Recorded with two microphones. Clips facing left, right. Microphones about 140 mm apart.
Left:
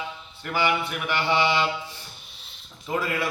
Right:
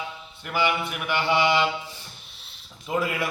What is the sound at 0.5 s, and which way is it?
Mantra, 5° right (ahead or behind).